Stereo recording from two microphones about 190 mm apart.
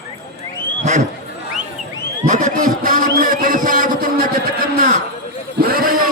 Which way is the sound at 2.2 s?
40° right (ahead or behind).